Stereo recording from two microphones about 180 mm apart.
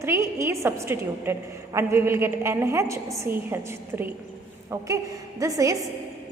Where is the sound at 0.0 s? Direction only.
15° right (ahead or behind).